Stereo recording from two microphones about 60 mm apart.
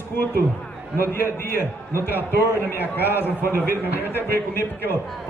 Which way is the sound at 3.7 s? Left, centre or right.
Right.